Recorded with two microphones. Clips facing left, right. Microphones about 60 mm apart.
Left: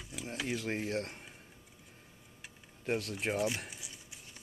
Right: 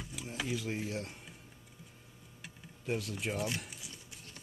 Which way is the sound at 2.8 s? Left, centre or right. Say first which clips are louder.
Left 2 dB; left.